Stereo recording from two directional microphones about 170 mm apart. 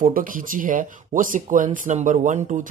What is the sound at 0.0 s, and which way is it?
Speech, 55° right (ahead or behind).